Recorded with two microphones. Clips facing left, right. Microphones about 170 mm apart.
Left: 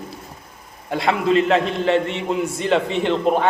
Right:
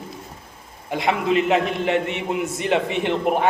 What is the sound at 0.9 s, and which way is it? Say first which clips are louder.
A man's voice: left 2 dB; 15° right (ahead or behind).